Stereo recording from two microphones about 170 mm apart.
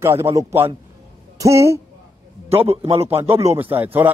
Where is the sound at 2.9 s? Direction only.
35° right (ahead or behind).